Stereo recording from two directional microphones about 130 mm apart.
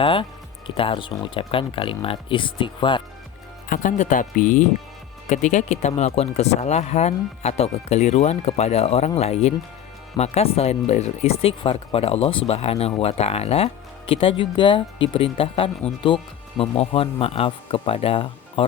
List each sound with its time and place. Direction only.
0.0 s speech: 40° left (ahead or behind)
3.7 s speech: 70° left (ahead or behind); by 4.6 s 90° left
5.3 s speech: 65° left (ahead or behind); by 18.6 s 45° left (ahead or behind)